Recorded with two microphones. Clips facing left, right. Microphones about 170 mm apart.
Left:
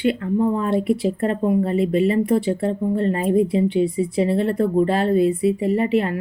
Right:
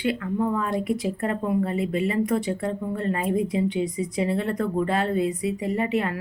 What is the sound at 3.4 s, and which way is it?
Speech, 20° right (ahead or behind).